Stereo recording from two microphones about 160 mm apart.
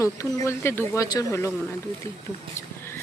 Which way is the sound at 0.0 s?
20° left (ahead or behind).